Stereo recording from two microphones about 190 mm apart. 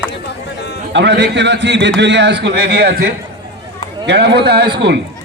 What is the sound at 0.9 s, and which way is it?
A man's voice, 65° right (ahead or behind).